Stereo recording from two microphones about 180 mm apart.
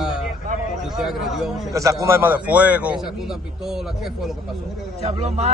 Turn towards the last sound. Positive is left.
turn(degrees=-35)  # may be behind; listen again after turning